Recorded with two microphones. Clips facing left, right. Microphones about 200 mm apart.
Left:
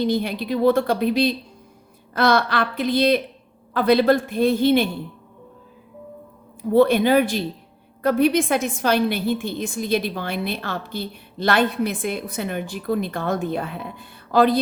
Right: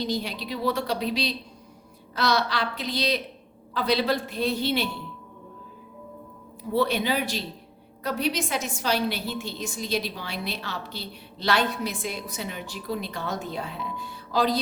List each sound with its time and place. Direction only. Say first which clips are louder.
0.0 s a woman's voice: left 7 dB; 55° left (ahead or behind)
6.7 s a woman's voice: left 9 dB; 50° left (ahead or behind)